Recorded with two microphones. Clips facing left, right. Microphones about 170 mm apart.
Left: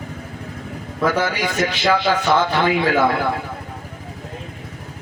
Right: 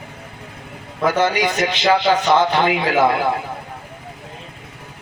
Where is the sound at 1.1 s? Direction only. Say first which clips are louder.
Right 4 dB; 20° right (ahead or behind).